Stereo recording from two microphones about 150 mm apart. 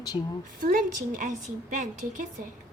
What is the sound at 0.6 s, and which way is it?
A woman's voice, 65° right (ahead or behind).